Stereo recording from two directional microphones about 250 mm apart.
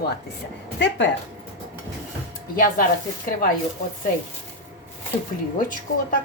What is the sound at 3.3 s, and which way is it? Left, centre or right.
Speech, left.